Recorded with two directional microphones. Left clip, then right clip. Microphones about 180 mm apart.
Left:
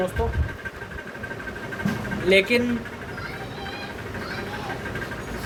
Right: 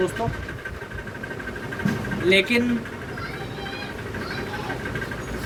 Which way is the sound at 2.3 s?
55° left (ahead or behind).